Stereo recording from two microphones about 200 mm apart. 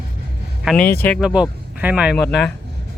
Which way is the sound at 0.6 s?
5° left (ahead or behind).